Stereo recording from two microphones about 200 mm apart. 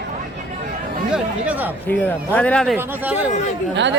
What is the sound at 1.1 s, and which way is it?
Speech, 10° right (ahead or behind).